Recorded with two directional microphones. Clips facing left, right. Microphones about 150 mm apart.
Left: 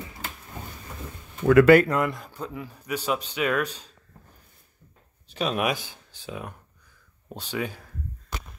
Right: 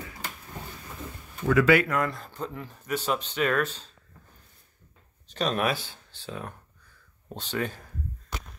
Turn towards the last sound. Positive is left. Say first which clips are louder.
# even
turn(degrees=10)  # may be behind; listen again after turning